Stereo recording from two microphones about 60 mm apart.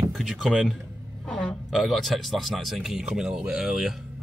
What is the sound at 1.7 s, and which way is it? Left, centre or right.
Speech, centre.